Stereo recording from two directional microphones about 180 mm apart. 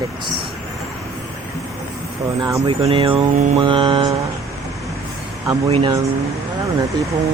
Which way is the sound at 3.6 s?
30° right (ahead or behind).